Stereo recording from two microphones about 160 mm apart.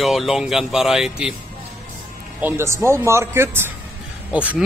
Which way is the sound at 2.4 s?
15° right (ahead or behind).